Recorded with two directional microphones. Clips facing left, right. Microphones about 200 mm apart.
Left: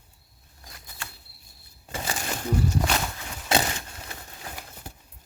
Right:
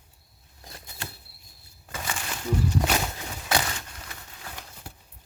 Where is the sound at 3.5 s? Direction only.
25° left (ahead or behind).